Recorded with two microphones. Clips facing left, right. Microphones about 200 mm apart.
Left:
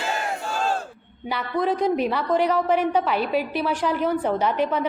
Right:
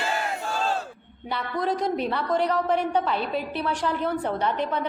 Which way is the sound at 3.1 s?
70° left (ahead or behind).